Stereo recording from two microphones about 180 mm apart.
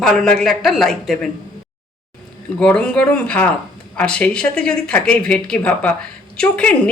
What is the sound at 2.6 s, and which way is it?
Speech, 5° left (ahead or behind).